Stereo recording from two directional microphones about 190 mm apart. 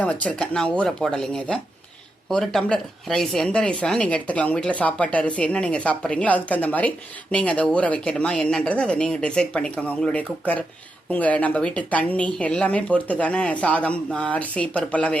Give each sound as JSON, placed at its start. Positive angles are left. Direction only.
{"t": 0.0, "sound": "speech", "side_deg": 5}